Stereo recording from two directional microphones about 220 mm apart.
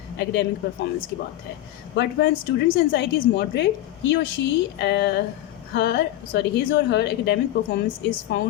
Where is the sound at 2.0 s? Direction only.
50° left (ahead or behind).